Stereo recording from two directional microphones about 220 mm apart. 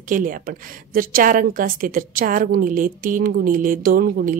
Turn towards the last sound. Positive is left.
turn(degrees=-40)  # may be behind; listen again after turning